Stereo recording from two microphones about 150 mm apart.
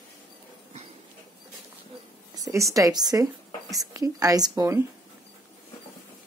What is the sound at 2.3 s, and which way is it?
Speech, 20° right (ahead or behind).